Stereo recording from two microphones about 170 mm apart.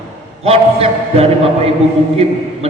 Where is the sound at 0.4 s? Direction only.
35° right (ahead or behind).